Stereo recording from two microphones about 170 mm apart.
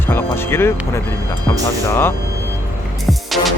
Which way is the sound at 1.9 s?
15° left (ahead or behind).